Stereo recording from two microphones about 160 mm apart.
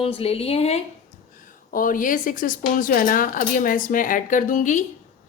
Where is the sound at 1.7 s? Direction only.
60° left (ahead or behind).